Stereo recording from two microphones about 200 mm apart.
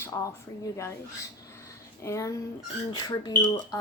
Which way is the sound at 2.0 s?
15° left (ahead or behind).